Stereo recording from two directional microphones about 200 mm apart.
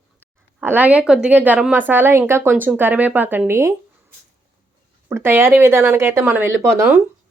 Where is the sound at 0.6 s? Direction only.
10° right (ahead or behind).